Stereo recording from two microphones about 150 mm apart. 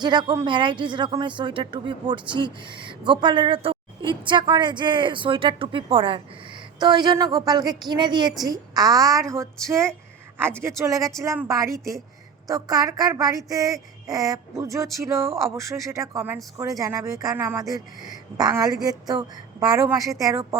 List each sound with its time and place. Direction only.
0.0 s speech: 30° right (ahead or behind)